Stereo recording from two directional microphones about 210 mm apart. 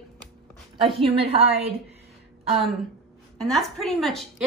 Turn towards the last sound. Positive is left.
turn(degrees=0)  # may be behind; listen again after turning